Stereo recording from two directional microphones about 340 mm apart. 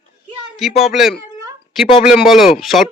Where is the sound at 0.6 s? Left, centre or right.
Centre.